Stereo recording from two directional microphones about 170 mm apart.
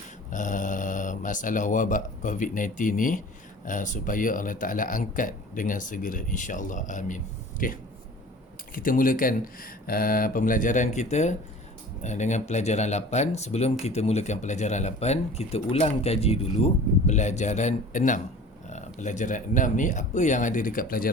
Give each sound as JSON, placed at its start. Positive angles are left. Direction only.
{"t": 0.3, "sound": "speech", "side_deg": 50}